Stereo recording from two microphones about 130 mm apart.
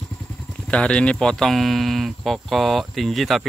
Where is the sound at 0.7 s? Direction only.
10° left (ahead or behind).